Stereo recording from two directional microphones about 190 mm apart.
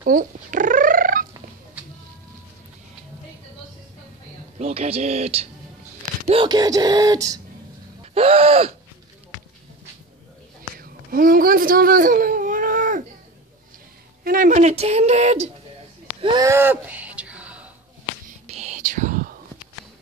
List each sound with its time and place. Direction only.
0.0 s cat: 45° right (ahead or behind)
4.6 s speech: 30° right (ahead or behind)
8.0 s gasp: 30° right (ahead or behind)
10.8 s baby cry: 50° right (ahead or behind)
14.2 s speech: 45° right (ahead or behind)
16.2 s a sound: 25° right (ahead or behind)
16.4 s a sound: 10° right (ahead or behind)
18.5 s whispering: 35° right (ahead or behind)